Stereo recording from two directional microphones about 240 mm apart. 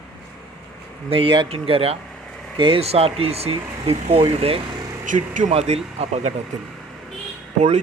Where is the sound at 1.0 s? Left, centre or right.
Right.